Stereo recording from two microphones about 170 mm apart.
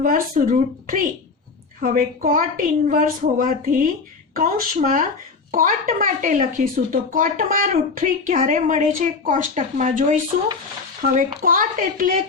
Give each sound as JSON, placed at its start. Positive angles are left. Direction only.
{"t": 0.0, "sound": "a woman's voice", "side_deg": -55}